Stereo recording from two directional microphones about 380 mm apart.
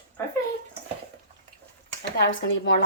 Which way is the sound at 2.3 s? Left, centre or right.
Left.